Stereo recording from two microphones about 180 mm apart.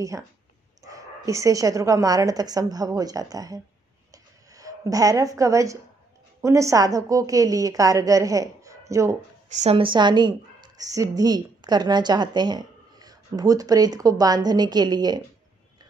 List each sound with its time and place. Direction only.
0.8 s a woman's voice: 20° right (ahead or behind)
4.1 s a sound: 20° right (ahead or behind)
6.4 s a woman's voice: 15° right (ahead or behind)
9.5 s a woman's voice: 35° right (ahead or behind)